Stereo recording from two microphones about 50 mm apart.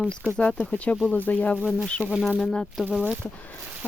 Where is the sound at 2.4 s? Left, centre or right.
Centre.